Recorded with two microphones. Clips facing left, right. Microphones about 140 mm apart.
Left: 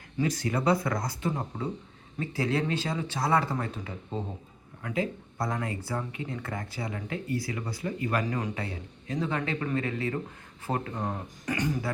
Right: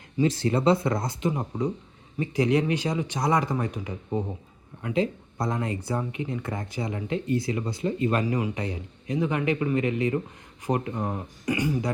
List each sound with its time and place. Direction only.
0.2 s speech: 30° right (ahead or behind); by 11.9 s 10° right (ahead or behind)